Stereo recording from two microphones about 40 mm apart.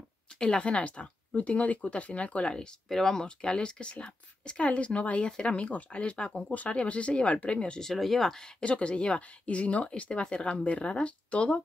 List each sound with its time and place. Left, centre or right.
0.4 s speech: left
2.9 s speech: centre
7.8 s speech: centre
8.6 s speech: left
9.6 s speech: left